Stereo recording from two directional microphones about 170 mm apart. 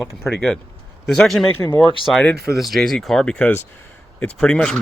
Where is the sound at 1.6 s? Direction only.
30° left (ahead or behind).